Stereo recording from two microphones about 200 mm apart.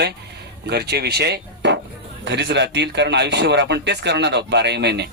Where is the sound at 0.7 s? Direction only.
55° right (ahead or behind).